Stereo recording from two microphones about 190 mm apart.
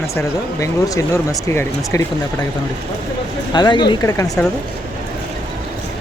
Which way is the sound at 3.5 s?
25° left (ahead or behind).